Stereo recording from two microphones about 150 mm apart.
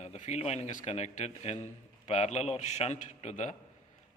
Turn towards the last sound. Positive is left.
turn(degrees=50)  # may be behind; listen again after turning